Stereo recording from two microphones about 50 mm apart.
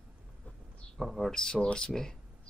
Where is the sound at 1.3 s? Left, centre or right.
Centre.